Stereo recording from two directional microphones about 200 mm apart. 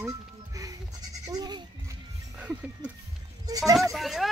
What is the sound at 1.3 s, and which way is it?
Speech, 20° right (ahead or behind).